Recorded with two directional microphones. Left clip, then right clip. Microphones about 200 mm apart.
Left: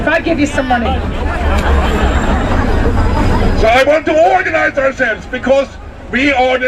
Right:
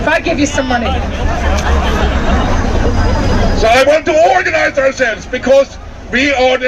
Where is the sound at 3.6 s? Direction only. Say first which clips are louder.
Right 1 dB; 30° right (ahead or behind).